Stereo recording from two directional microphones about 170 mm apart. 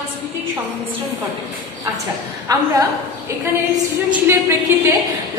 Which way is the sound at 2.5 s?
20° right (ahead or behind).